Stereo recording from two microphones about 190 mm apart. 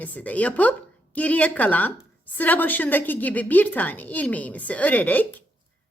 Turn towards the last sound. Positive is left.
turn(degrees=10)  # may be behind; listen again after turning